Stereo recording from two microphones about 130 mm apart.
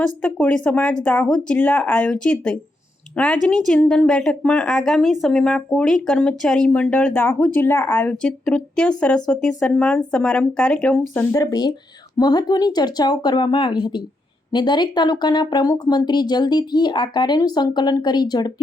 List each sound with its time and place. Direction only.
0.0 s a woman's voice: 10° left (ahead or behind)
11.3 s speech: 30° left (ahead or behind)